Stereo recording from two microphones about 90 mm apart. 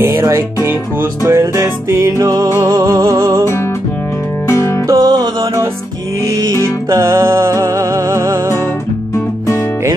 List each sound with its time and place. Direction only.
0.0 s music: 30° right (ahead or behind)
4.5 s music: 35° left (ahead or behind)
4.8 s music: 45° right (ahead or behind); by 8.5 s 30° right (ahead or behind)